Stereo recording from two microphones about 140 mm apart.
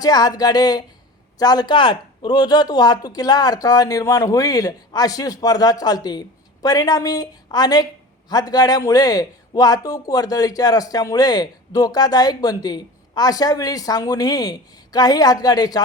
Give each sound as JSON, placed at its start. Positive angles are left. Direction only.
{"t": 0.0, "sound": "speech", "side_deg": 30}